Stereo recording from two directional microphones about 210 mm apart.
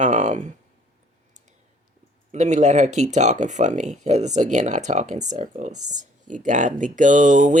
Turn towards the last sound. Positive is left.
turn(degrees=-35)  # may be behind; listen again after turning